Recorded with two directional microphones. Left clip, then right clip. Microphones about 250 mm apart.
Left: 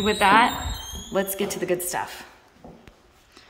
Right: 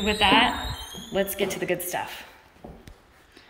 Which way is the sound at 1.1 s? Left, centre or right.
Left.